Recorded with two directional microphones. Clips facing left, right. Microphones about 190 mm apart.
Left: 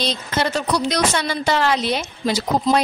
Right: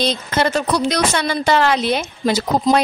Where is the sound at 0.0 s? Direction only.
55° right (ahead or behind).